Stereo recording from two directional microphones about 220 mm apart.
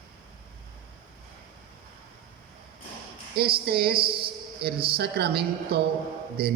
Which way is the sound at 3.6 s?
45° right (ahead or behind).